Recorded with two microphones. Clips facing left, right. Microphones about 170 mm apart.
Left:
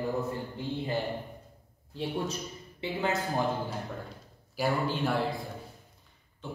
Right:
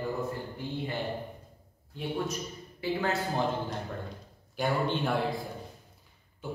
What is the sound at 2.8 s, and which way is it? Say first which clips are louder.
Speech: right 1 dB; 20° left (ahead or behind).